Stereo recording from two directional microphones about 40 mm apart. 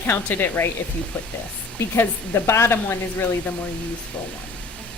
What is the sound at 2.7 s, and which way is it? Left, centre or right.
Speech, left.